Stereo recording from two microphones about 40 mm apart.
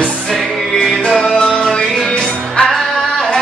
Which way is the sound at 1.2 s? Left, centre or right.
Centre.